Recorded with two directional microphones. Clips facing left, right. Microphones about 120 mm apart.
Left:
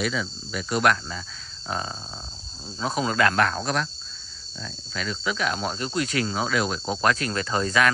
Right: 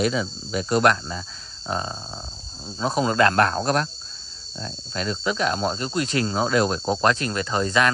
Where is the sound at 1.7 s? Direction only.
25° right (ahead or behind).